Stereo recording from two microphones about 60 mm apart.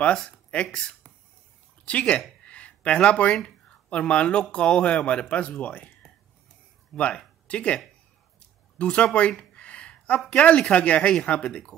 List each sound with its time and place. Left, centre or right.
0.5 s speech: centre
2.4 s a sound: left
3.9 s speech: left
7.0 s speech: centre
9.4 s a sound: centre
10.2 s speech: centre